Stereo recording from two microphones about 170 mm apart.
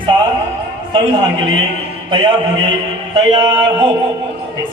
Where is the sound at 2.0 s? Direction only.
30° right (ahead or behind).